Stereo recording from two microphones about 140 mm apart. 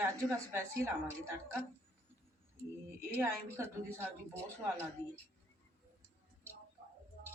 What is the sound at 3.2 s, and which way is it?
A woman's voice, 15° right (ahead or behind).